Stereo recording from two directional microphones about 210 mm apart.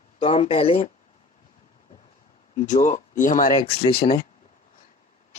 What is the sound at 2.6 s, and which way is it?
Speech, 35° left (ahead or behind).